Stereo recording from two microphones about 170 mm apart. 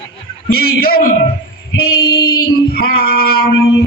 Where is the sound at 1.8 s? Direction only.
65° left (ahead or behind).